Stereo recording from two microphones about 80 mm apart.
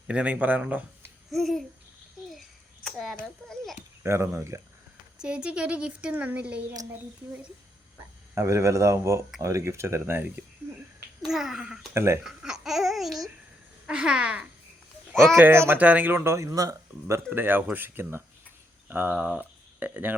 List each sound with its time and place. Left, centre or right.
0.1 s speech: centre
1.3 s a child's voice: centre
2.8 s a sound: centre
4.0 s speech: right
5.2 s speech: centre
8.4 s speech: right
11.2 s a child's voice: centre
11.9 s speech: right
12.2 s speech: centre
15.1 s speech: centre
15.4 s speech: right
15.8 s speech: centre; by 17.2 s right
17.2 s speech: right